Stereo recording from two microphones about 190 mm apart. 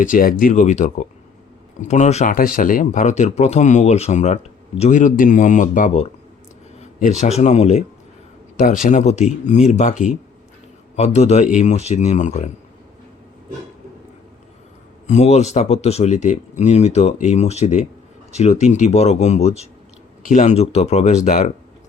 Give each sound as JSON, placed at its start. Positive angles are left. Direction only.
{"t": 0.0, "sound": "speech", "side_deg": 45}
{"t": 15.0, "sound": "speech", "side_deg": 35}